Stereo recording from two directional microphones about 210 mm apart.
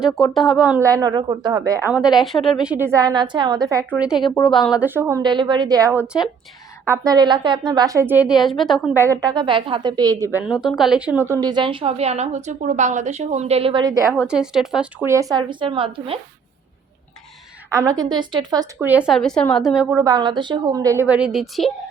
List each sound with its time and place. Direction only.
0.0 s speech: centre (ahead or behind)
0.9 s speech: 15° right (ahead or behind)
4.4 s speech: centre (ahead or behind)
9.0 s a woman's voice: 15° right (ahead or behind)
10.4 s a woman's voice: 5° right (ahead or behind)
14.3 s speech: 5° right (ahead or behind)
15.0 s a woman's voice: 15° right (ahead or behind)
17.7 s speech: 15° right (ahead or behind)
20.1 s speech: 20° right (ahead or behind); by 21.7 s centre (ahead or behind)